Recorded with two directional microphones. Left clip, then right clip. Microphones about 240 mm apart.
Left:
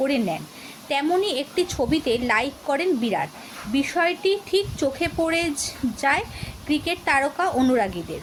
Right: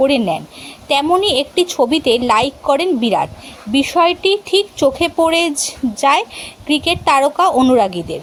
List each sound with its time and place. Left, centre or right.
0.0 s a woman's voice: right